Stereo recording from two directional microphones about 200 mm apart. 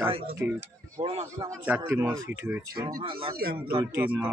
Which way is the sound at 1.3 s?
15° right (ahead or behind).